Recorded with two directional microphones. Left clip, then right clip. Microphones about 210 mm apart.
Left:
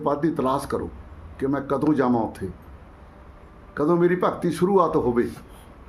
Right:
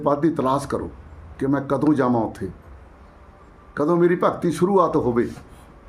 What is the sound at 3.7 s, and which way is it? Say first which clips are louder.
Speech: right 2 dB; 15° right (ahead or behind).